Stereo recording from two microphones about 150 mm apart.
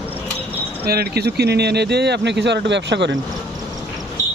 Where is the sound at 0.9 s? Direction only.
90° right.